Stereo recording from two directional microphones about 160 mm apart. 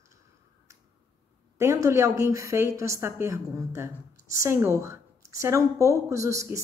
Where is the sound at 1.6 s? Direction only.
15° right (ahead or behind).